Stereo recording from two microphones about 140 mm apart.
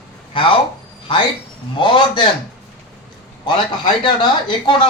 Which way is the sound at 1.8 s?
35° left (ahead or behind).